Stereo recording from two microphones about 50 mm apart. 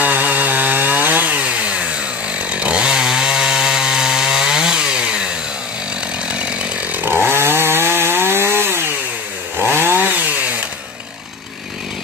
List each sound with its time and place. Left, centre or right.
0.0 s chainsaw: right; by 5.3 s centre
6.9 s chainsaw: right